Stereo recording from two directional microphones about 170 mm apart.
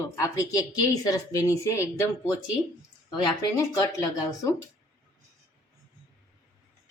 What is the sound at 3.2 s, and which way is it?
Speech, 25° left (ahead or behind).